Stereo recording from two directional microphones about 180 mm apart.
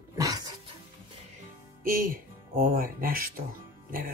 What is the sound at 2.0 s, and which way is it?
Speech, 55° right (ahead or behind).